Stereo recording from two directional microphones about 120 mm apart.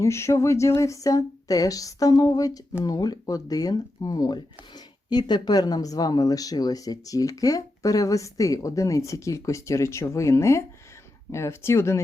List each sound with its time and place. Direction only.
0.0 s speech: 25° left (ahead or behind)